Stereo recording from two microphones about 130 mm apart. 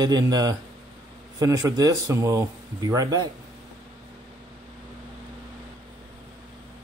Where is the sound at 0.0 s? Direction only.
30° right (ahead or behind).